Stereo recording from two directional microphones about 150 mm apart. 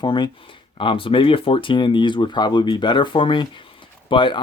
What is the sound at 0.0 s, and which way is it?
Speech, 30° left (ahead or behind).